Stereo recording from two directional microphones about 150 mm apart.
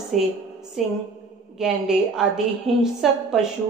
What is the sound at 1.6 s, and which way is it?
A woman's voice, 5° right (ahead or behind).